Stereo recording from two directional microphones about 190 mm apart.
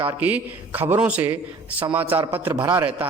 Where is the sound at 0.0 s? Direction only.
10° right (ahead or behind).